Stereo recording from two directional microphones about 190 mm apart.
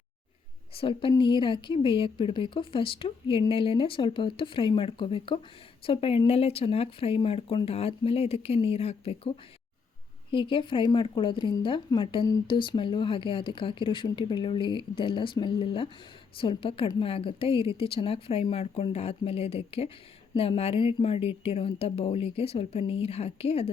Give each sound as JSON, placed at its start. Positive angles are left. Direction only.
{"t": 0.7, "sound": "a woman's voice", "side_deg": 30}
{"t": 10.3, "sound": "a woman's voice", "side_deg": 25}